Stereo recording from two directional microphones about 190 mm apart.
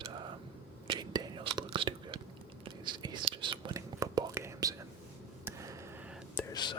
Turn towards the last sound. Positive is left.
turn(degrees=25)  # may be behind; listen again after turning